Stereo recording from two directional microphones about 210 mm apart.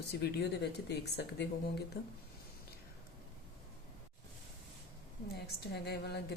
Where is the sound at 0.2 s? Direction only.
50° left (ahead or behind).